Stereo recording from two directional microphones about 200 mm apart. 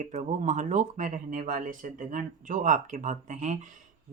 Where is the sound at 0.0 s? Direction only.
35° right (ahead or behind).